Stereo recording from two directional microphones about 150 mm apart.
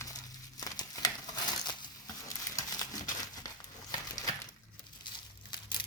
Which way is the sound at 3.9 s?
25° left (ahead or behind).